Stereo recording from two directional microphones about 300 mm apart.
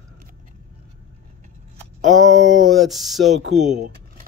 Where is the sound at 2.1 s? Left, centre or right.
Centre.